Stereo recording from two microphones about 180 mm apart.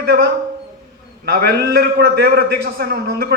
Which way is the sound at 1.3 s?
60° right (ahead or behind).